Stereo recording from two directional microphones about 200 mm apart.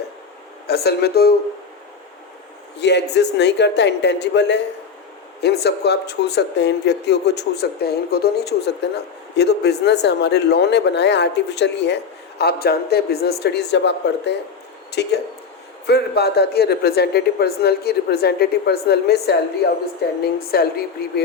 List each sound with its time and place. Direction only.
0.7 s speech: 50° left (ahead or behind)
2.7 s speech: 60° left (ahead or behind)